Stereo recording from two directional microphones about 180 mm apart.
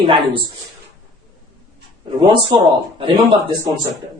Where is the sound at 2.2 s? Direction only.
25° right (ahead or behind).